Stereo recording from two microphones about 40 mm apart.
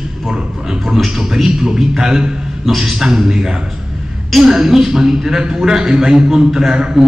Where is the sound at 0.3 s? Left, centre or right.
Centre.